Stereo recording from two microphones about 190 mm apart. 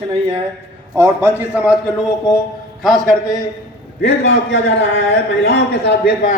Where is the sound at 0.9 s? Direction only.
15° right (ahead or behind).